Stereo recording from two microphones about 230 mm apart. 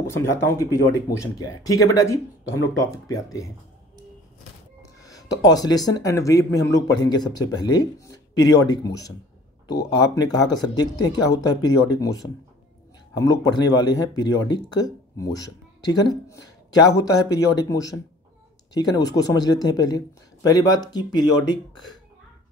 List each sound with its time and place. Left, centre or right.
0.0 s speech: centre
5.0 s speech: centre